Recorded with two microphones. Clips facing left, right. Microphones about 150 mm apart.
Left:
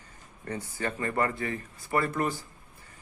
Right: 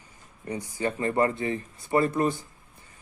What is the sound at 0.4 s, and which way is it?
Speech, 15° right (ahead or behind).